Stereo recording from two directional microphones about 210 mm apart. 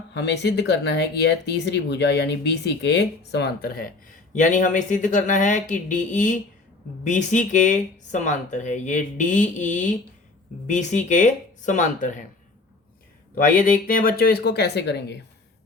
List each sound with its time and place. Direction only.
0.1 s speech: 55° left (ahead or behind); by 12.2 s 35° left (ahead or behind)
13.3 s speech: 40° left (ahead or behind)